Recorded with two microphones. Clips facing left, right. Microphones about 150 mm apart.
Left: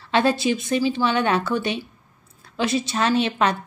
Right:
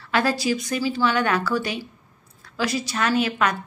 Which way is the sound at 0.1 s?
25° left (ahead or behind).